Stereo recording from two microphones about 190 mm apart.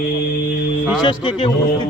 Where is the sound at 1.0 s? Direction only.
25° left (ahead or behind).